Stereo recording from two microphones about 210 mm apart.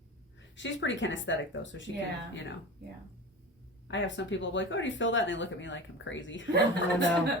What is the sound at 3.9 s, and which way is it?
Speech, 60° left (ahead or behind).